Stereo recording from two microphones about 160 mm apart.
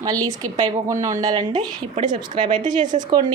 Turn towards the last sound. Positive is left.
turn(degrees=-25)  # may be behind; listen again after turning